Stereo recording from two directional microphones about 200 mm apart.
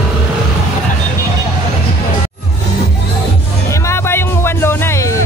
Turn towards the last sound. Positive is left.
turn(degrees=10)  # may be behind; listen again after turning